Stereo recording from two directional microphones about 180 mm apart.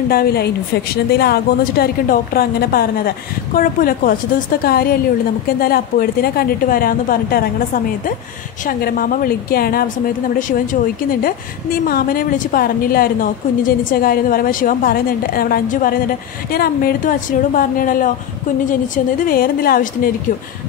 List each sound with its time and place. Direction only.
0.1 s a woman's voice: 60° left (ahead or behind)
19.2 s a woman's voice: 55° left (ahead or behind)